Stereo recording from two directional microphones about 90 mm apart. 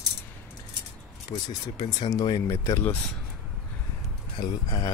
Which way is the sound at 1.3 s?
90° left.